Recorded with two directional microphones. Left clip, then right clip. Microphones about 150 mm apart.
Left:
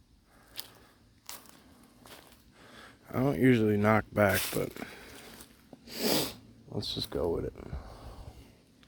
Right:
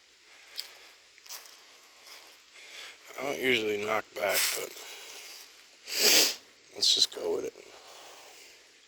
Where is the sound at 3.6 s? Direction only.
45° left (ahead or behind).